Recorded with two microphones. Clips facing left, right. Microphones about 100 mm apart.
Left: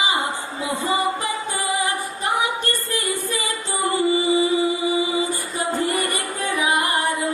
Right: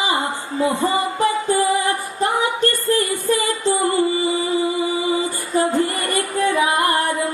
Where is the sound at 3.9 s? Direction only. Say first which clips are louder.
Even; 20° left (ahead or behind).